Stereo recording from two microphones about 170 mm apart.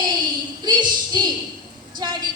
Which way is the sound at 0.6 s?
25° right (ahead or behind).